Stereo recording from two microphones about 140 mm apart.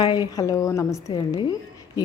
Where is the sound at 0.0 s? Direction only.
30° left (ahead or behind).